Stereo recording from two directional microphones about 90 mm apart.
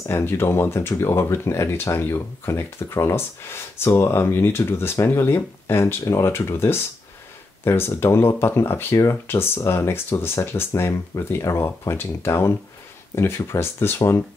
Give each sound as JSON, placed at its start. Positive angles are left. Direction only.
{"t": 0.1, "sound": "speech", "side_deg": 25}